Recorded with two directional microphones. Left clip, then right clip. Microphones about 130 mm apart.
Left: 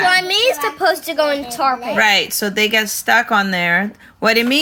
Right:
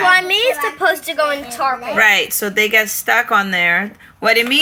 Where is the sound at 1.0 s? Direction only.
60° left (ahead or behind).